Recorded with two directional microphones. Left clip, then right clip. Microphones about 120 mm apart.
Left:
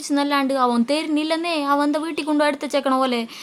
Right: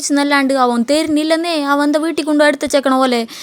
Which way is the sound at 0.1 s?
40° right (ahead or behind).